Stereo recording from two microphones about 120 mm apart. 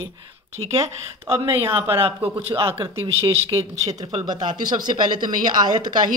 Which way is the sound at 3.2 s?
60° right (ahead or behind).